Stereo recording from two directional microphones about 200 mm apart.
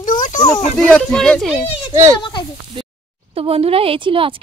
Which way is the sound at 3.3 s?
30° right (ahead or behind).